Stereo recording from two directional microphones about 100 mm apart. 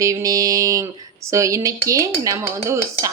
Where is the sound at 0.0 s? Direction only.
35° right (ahead or behind).